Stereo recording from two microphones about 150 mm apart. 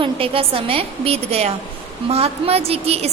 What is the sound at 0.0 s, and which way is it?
A woman's voice, 40° right (ahead or behind).